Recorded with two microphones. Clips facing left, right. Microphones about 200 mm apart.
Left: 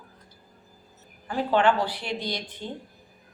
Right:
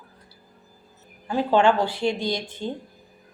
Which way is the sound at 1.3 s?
25° right (ahead or behind).